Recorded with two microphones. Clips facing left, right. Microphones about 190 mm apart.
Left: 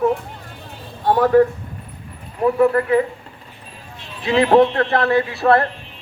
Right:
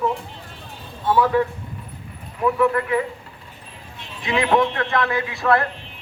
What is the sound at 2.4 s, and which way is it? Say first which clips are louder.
Speech: left 4 dB; 35° left (ahead or behind).